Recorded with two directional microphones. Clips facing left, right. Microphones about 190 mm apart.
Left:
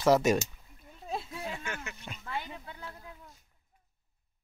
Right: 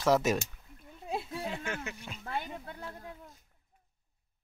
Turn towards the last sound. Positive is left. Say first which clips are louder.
# right 2 dB
turn(degrees=-50)  # may be behind; listen again after turning